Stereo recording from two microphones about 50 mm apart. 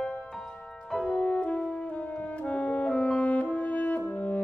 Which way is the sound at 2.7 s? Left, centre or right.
Left.